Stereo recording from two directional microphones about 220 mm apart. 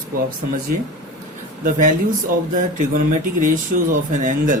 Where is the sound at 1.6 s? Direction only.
35° right (ahead or behind).